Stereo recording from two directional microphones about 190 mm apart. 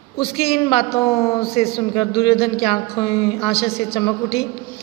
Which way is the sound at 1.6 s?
30° left (ahead or behind).